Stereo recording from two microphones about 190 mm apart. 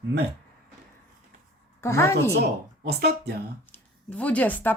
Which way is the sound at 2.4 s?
60° right (ahead or behind).